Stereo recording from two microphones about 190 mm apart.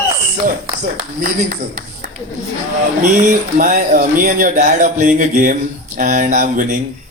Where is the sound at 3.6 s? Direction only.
45° right (ahead or behind).